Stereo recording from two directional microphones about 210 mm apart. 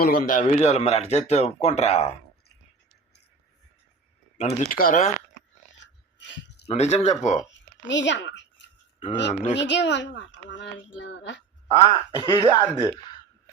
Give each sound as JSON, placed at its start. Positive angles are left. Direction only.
{"t": 0.0, "sound": "speech", "side_deg": 40}
{"t": 4.4, "sound": "speech", "side_deg": 30}
{"t": 5.8, "sound": "dog", "side_deg": 60}
{"t": 6.7, "sound": "speech", "side_deg": 30}
{"t": 7.4, "sound": "a sound", "side_deg": 60}
{"t": 9.3, "sound": "speech", "side_deg": 30}
{"t": 9.6, "sound": "speech", "side_deg": 55}
{"t": 11.8, "sound": "speech", "side_deg": -25}
{"t": 12.2, "sound": "speech", "side_deg": 15}